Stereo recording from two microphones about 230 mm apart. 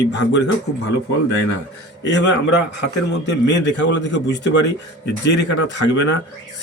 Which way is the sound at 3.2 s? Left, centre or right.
Left.